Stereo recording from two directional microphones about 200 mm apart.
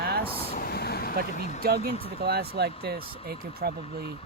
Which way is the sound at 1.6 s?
50° right (ahead or behind).